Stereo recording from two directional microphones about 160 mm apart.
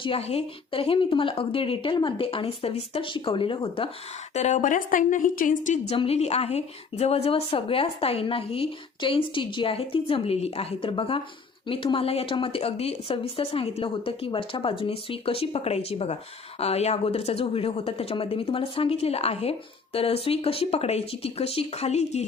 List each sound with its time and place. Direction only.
0.0 s a woman's voice: 35° left (ahead or behind)
4.4 s a woman's voice: 45° left (ahead or behind)
5.9 s a woman's voice: 40° left (ahead or behind)